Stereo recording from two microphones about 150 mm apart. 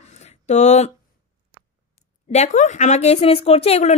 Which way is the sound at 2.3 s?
50° left (ahead or behind).